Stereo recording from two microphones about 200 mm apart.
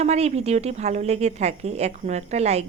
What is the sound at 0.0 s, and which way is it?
A woman's voice, 35° right (ahead or behind).